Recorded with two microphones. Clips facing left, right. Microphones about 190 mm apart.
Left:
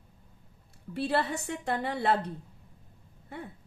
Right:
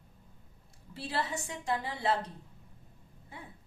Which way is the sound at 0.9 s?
65° left (ahead or behind).